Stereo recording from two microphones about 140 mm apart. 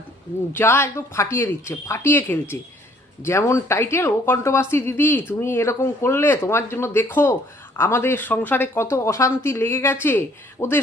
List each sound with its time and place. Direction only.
0.5 s speech: 15° left (ahead or behind)